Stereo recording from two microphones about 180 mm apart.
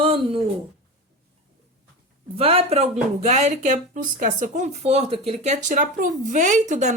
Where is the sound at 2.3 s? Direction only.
30° right (ahead or behind).